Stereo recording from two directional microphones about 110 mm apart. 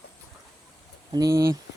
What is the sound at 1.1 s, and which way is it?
Speech, 35° right (ahead or behind).